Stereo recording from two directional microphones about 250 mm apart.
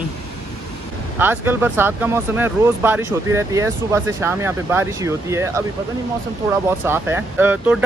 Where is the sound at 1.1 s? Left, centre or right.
Centre.